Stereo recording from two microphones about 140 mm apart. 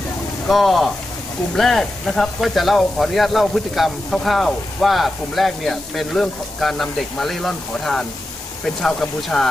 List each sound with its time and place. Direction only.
0.5 s speech: centre (ahead or behind)